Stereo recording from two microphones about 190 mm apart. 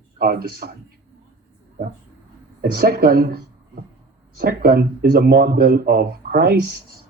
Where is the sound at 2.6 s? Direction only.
55° right (ahead or behind).